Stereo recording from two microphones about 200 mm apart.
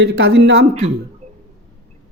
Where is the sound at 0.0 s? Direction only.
65° right (ahead or behind).